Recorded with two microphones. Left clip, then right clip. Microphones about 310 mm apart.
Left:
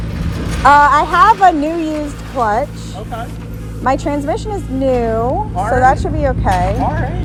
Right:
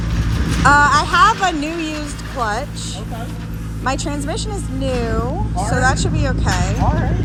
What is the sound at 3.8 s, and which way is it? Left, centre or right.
Speech, centre.